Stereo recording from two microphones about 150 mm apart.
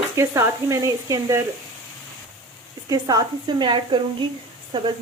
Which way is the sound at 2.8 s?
25° right (ahead or behind).